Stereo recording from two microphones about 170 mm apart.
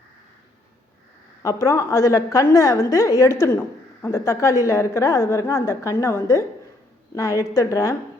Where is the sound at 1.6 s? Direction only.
15° left (ahead or behind).